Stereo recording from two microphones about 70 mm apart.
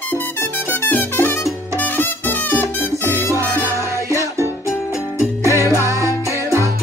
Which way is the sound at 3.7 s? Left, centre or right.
Right.